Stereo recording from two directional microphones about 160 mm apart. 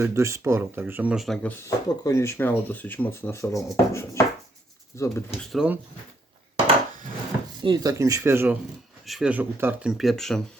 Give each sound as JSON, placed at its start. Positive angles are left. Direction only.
{"t": 0.0, "sound": "speech", "side_deg": -15}
{"t": 5.4, "sound": "speech", "side_deg": 0}
{"t": 7.6, "sound": "speech", "side_deg": -25}
{"t": 9.0, "sound": "speech", "side_deg": -5}
{"t": 10.0, "sound": "speech", "side_deg": 0}